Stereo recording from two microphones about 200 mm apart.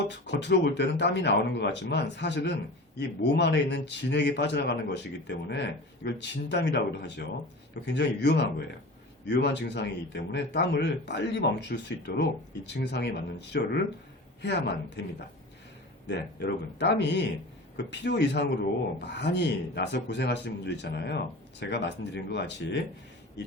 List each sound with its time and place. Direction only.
0.0 s a man's voice: 60° left (ahead or behind)
16.0 s a man's voice: 55° left (ahead or behind)